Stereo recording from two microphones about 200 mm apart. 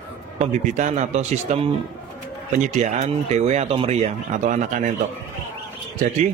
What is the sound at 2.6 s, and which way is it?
A man's voice, 35° right (ahead or behind).